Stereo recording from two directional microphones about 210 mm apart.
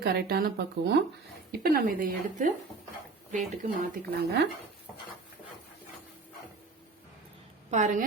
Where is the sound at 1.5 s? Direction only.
45° right (ahead or behind).